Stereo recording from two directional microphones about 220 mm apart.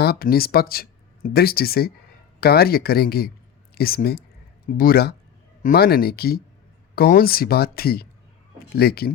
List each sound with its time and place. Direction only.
0.0 s speech: 45° left (ahead or behind)